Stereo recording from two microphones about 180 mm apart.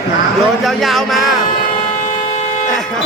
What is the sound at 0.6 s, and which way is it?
Speech, centre (ahead or behind).